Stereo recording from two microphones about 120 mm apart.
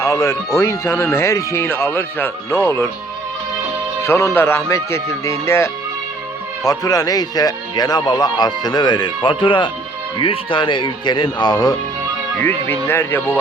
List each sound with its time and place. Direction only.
0.0 s speech: 25° left (ahead or behind)
4.0 s speech: 20° left (ahead or behind)
12.4 s speech: 15° left (ahead or behind)